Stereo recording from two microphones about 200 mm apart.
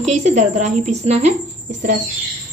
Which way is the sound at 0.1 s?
35° right (ahead or behind).